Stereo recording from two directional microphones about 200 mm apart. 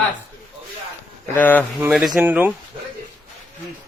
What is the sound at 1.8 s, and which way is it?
Speech, 5° right (ahead or behind).